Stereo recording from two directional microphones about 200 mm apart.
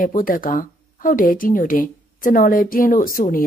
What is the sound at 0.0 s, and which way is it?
Speech, 45° left (ahead or behind).